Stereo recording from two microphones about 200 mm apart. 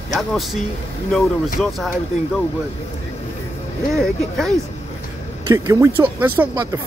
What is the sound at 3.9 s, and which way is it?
Speech, centre (ahead or behind).